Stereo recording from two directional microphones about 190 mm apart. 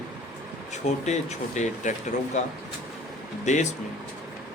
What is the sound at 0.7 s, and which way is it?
Speech, 40° left (ahead or behind).